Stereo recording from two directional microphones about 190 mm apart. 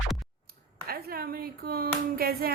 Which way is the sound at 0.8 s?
50° right (ahead or behind).